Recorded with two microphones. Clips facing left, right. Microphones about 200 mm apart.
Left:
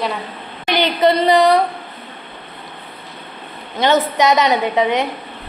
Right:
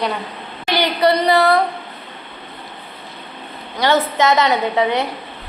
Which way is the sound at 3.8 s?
20° left (ahead or behind).